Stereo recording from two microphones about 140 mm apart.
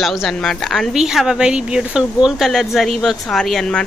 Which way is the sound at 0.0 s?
Centre (ahead or behind).